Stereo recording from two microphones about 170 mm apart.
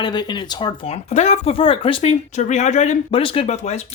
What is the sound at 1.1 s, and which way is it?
Speech, 40° left (ahead or behind).